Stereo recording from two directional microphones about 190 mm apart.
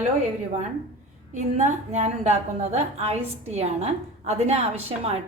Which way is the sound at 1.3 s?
40° right (ahead or behind).